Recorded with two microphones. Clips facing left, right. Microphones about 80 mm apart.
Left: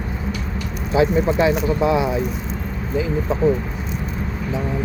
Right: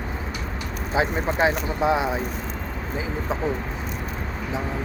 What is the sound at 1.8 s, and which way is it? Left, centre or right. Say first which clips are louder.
Speech: left 1 dB; right.